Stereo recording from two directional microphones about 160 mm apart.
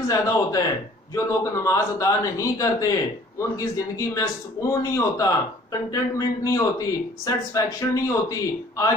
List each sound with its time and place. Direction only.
0.1 s a man's voice: 20° left (ahead or behind)